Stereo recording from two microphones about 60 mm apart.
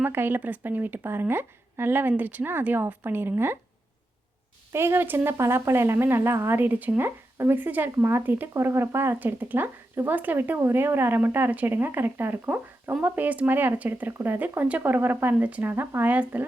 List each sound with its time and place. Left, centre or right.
0.0 s a woman's voice: right
4.7 s a woman's voice: right
8.5 s speech: right
9.1 s a woman's voice: right
15.7 s a woman's voice: right